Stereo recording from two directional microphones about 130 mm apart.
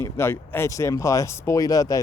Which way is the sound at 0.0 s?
20° left (ahead or behind).